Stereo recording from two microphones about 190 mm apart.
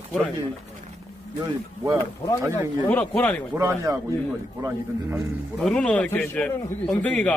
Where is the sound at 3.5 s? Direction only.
15° right (ahead or behind).